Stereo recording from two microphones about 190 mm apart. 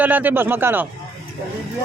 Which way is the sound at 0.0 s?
10° right (ahead or behind).